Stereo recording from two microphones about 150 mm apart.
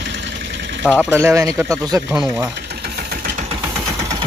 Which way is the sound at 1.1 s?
20° right (ahead or behind).